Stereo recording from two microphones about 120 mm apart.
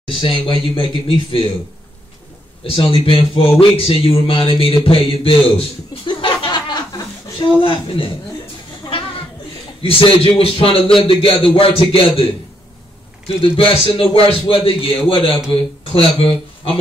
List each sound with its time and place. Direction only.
0.2 s a man's voice: 50° left (ahead or behind)
2.6 s a man's voice: 50° left (ahead or behind)
9.8 s a man's voice: 50° left (ahead or behind)
13.3 s a man's voice: 50° left (ahead or behind)